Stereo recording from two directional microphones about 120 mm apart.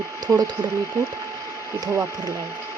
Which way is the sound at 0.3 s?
25° right (ahead or behind).